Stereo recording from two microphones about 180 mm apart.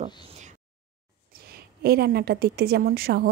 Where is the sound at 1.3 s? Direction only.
55° right (ahead or behind).